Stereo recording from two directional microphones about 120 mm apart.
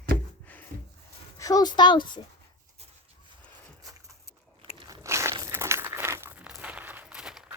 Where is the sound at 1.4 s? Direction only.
30° left (ahead or behind).